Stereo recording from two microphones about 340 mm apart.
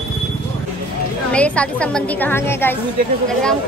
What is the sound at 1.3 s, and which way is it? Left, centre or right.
A woman's voice, centre.